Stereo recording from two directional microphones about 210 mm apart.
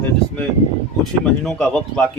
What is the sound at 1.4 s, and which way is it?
Speech, 5° left (ahead or behind).